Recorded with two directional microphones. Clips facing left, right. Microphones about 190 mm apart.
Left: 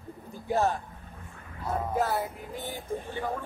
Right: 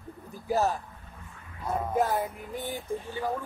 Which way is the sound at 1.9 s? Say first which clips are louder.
Right 3 dB; 15° right (ahead or behind).